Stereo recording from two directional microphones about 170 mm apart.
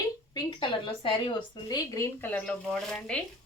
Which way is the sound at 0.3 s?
30° left (ahead or behind).